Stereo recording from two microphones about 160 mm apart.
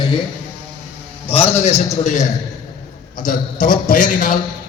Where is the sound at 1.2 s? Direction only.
40° left (ahead or behind); by 4.4 s 55° left (ahead or behind).